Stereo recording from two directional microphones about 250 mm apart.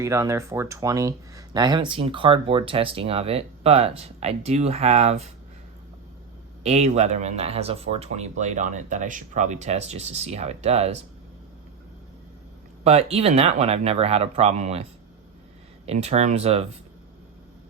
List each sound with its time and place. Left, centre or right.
0.0 s speech: centre
6.6 s speech: right
12.8 s speech: right
15.9 s speech: right